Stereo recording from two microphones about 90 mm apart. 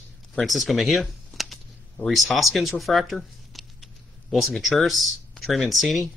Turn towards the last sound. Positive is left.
turn(degrees=0)  # may be behind; listen again after turning